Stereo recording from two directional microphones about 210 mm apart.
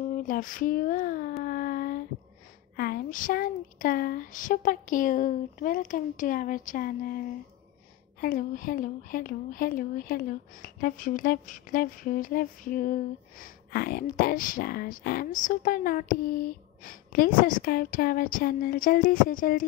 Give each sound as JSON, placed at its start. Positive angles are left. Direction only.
{"t": 0.2, "sound": "speech", "side_deg": 40}
{"t": 1.4, "sound": "a sound", "side_deg": 45}
{"t": 2.7, "sound": "speech", "side_deg": 45}